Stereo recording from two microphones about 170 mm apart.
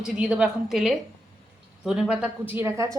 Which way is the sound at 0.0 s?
5° right (ahead or behind).